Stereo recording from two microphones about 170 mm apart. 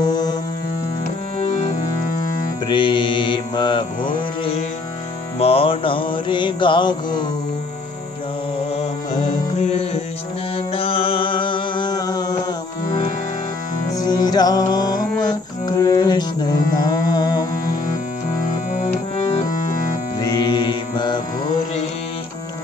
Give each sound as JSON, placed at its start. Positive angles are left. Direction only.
{"t": 0.0, "sound": "music", "side_deg": 25}
{"t": 1.4, "sound": "music", "side_deg": 45}
{"t": 2.7, "sound": "mantra", "side_deg": 30}
{"t": 5.4, "sound": "music", "side_deg": 35}
{"t": 9.2, "sound": "music", "side_deg": 35}
{"t": 13.9, "sound": "music", "side_deg": 20}
{"t": 18.7, "sound": "music", "side_deg": 45}
{"t": 20.2, "sound": "music", "side_deg": 25}